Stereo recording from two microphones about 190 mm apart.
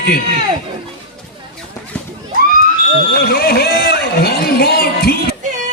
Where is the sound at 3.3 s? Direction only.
55° left (ahead or behind).